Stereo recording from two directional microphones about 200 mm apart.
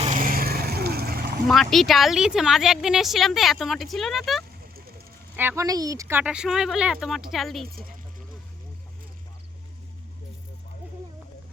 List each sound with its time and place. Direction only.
0.0 s vehicle: 40° right (ahead or behind)
1.5 s a woman's voice: centre (ahead or behind)
5.4 s a woman's voice: 15° right (ahead or behind)